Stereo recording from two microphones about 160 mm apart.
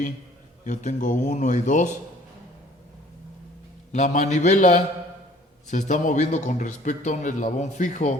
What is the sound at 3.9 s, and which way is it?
A man's voice, 50° left (ahead or behind).